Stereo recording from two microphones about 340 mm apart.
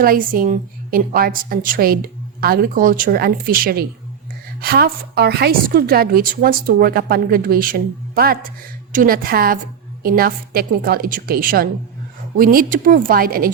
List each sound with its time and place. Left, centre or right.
0.0 s a woman's voice: right